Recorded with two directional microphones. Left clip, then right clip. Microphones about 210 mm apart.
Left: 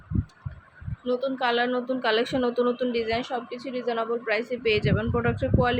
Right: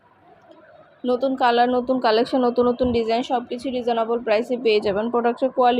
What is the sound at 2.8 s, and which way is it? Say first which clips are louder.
A woman's voice: right 6 dB; 15° right (ahead or behind).